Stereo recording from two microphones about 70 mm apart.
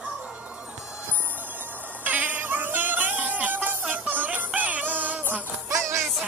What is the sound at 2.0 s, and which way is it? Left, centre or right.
Music, right.